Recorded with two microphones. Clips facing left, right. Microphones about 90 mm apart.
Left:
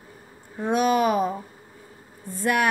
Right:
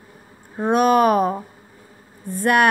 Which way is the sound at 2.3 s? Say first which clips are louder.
Right 6 dB; 55° right (ahead or behind).